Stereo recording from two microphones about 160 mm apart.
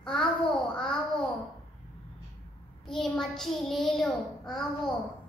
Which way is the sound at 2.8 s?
5° left (ahead or behind).